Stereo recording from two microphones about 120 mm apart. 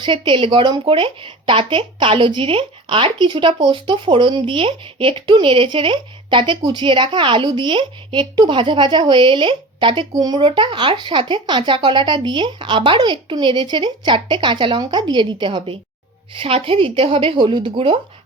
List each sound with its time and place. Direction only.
0.0 s a woman's voice: 45° right (ahead or behind)